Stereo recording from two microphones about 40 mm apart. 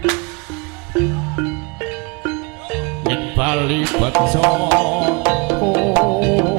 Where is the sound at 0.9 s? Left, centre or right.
Centre.